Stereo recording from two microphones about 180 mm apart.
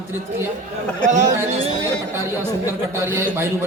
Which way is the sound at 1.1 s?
45° right (ahead or behind).